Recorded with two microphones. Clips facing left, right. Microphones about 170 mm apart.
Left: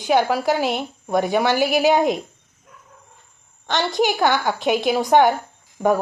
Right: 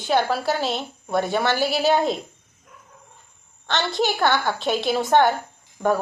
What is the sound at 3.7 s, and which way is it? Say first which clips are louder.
A woman's voice: left 3 dB; 15° left (ahead or behind).